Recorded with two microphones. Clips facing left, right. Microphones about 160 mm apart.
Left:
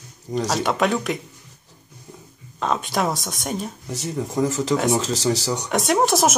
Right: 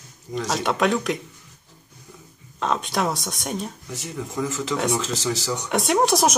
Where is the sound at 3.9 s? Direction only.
35° left (ahead or behind).